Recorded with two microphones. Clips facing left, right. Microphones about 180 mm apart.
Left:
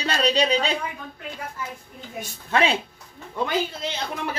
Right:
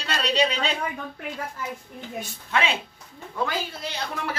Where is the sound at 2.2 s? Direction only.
40° left (ahead or behind).